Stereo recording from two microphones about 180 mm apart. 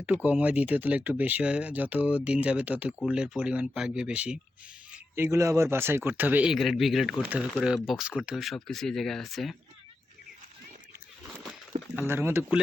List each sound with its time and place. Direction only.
0.3 s speech: 10° right (ahead or behind)
4.9 s a sound: 15° right (ahead or behind)
5.7 s speech: 15° right (ahead or behind)
11.9 s speech: 10° right (ahead or behind)